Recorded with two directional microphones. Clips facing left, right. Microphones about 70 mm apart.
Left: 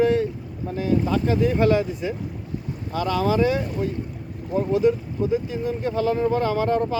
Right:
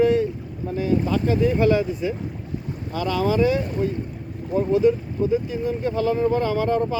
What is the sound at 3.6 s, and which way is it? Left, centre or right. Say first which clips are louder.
Speech: right 2 dB; right.